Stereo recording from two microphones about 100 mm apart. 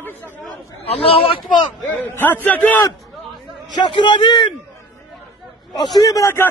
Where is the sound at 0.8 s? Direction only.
75° left (ahead or behind).